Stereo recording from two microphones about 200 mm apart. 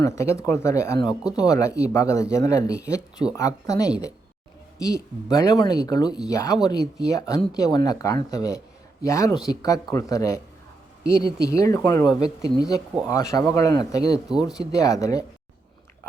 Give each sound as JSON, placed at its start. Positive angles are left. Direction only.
{"t": 0.0, "sound": "speech", "side_deg": 15}
{"t": 14.3, "sound": "speech", "side_deg": 0}
{"t": 14.5, "sound": "speech", "side_deg": 15}